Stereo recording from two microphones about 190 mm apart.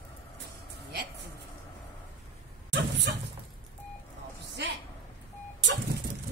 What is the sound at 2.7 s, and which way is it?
Dog, 65° right (ahead or behind).